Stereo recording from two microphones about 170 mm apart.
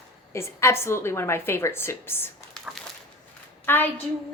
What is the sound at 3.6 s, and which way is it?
Speech, 10° left (ahead or behind).